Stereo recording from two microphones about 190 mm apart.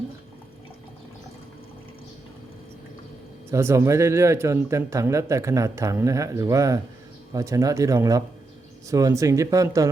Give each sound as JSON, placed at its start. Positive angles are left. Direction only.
{"t": 3.5, "sound": "speech", "side_deg": -15}